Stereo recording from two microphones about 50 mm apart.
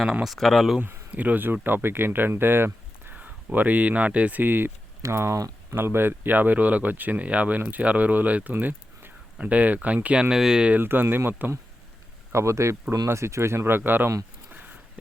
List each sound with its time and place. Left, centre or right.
0.0 s speech: centre
0.3 s speech: centre
1.1 s speech: right
1.6 s speech: right
3.2 s speech: right
5.0 s speech: right
10.2 s speech: centre
10.8 s speech: right
12.3 s speech: right
12.9 s speech: right
14.5 s a sound: right